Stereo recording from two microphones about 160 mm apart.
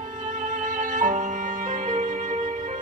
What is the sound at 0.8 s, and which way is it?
Violin, 55° right (ahead or behind).